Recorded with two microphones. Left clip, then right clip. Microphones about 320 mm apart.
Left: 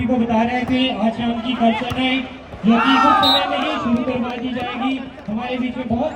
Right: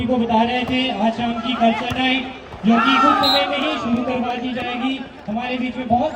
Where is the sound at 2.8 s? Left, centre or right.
Centre.